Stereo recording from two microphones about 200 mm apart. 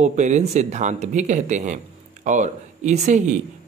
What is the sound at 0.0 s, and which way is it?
Speech, 35° right (ahead or behind).